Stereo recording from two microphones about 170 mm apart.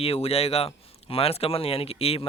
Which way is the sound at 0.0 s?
35° left (ahead or behind).